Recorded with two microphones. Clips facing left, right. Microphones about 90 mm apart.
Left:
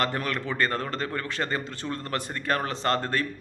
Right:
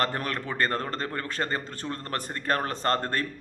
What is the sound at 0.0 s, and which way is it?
A man's voice, 40° right (ahead or behind).